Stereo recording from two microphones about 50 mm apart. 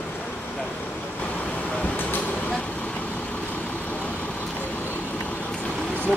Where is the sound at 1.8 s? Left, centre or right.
Left.